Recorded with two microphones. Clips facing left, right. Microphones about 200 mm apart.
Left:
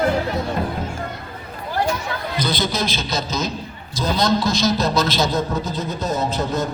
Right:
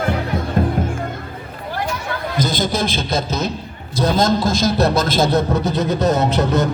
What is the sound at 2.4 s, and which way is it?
A man's voice, 45° right (ahead or behind).